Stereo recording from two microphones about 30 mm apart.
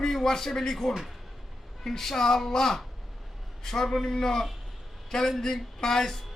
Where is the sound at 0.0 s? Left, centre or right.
Centre.